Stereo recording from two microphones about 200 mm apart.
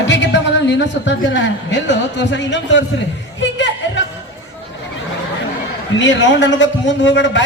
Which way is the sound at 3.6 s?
65° left (ahead or behind).